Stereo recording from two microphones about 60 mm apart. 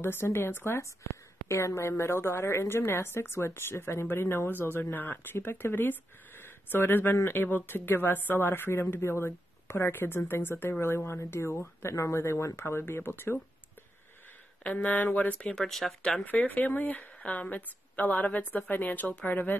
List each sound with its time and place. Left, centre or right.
0.0 s a woman's voice: left
1.5 s a woman's voice: left
9.8 s a woman's voice: left
14.6 s speech: left
15.4 s speech: centre
16.3 s speech: left